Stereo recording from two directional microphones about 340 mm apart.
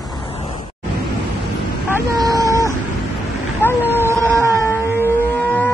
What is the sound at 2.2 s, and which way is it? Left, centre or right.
Vehicle, centre.